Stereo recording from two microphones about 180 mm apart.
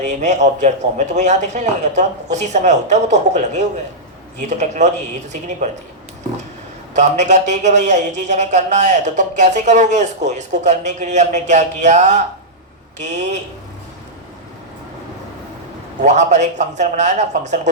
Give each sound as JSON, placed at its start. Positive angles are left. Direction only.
{"t": 0.2, "sound": "a man's voice", "side_deg": -40}
{"t": 6.9, "sound": "a man's voice", "side_deg": -40}
{"t": 16.0, "sound": "a man's voice", "side_deg": -40}